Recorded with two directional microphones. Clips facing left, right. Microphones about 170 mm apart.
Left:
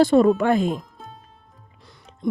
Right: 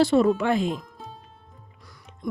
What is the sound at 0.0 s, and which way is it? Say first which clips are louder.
Speech: left 4 dB; 50° left (ahead or behind).